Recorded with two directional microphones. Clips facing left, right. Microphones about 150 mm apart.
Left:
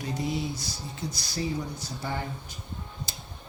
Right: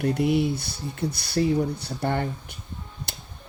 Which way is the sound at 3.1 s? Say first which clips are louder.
Right 2 dB; 65° right (ahead or behind).